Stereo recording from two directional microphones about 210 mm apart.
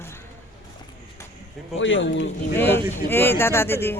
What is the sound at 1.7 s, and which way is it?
Speech, 60° left (ahead or behind).